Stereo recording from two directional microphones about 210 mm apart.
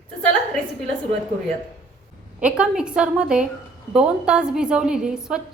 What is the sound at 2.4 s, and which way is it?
Speech, 5° right (ahead or behind).